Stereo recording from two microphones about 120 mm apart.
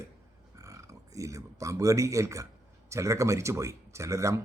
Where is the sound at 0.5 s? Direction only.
25° right (ahead or behind).